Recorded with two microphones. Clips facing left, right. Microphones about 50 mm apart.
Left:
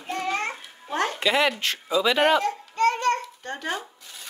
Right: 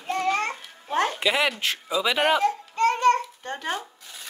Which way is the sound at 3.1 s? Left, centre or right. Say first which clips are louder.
Right 1 dB; right.